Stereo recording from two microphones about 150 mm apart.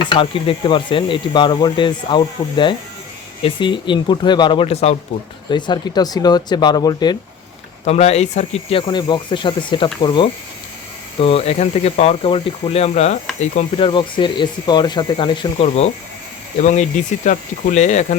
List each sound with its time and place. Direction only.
0.0 s speech: 35° left (ahead or behind)
5.5 s speech: 30° left (ahead or behind)
7.9 s speech: 45° left (ahead or behind)
8.9 s speech: 30° left (ahead or behind)
11.2 s speech: 40° left (ahead or behind)
15.6 s speech: 45° left (ahead or behind)
16.6 s speech: 55° left (ahead or behind)